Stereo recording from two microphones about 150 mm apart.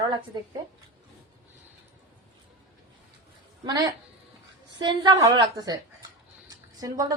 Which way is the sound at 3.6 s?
25° right (ahead or behind).